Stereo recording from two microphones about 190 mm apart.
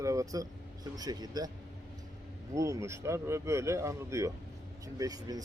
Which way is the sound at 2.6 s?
15° right (ahead or behind).